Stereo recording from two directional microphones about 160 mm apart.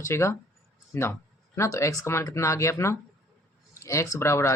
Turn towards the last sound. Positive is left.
turn(degrees=15)  # may be behind; listen again after turning